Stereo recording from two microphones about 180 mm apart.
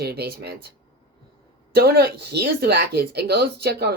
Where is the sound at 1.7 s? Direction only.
60° right (ahead or behind).